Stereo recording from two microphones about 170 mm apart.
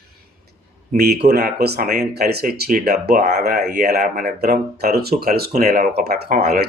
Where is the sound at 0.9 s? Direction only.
65° right (ahead or behind).